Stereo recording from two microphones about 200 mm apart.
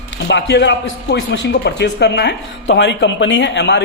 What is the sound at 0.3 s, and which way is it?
A man's voice, 60° left (ahead or behind).